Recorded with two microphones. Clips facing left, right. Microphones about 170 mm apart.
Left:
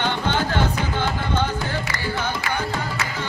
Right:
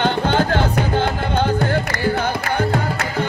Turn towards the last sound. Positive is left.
turn(degrees=-60)  # may be behind; listen again after turning